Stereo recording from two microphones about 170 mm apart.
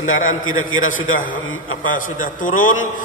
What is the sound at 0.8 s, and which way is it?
A man's voice, 50° left (ahead or behind).